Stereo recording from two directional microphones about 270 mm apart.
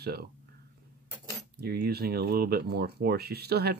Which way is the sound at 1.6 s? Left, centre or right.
Right.